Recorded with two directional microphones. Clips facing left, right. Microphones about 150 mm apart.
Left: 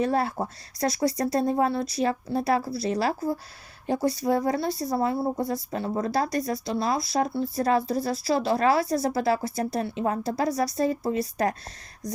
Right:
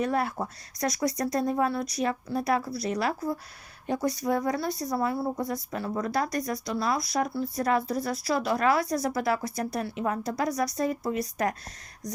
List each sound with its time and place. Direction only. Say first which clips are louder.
0.0 s speech: left 3 dB; 30° left (ahead or behind)